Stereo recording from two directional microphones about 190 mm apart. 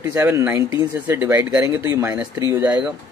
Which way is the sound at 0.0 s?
10° right (ahead or behind).